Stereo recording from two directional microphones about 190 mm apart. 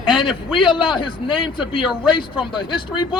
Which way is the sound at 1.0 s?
25° left (ahead or behind).